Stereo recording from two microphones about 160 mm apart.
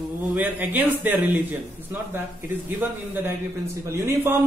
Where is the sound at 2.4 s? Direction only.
15° right (ahead or behind).